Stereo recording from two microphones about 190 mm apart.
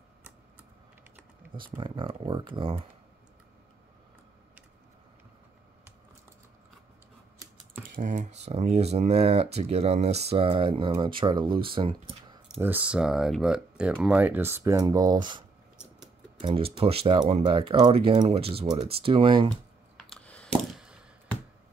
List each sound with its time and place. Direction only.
1.8 s speech: 30° right (ahead or behind)
7.9 s speech: 45° right (ahead or behind); by 12.6 s 25° right (ahead or behind)
12.6 s speech: 5° right (ahead or behind); by 19.5 s 30° right (ahead or behind)
20.1 s a sound: 5° left (ahead or behind)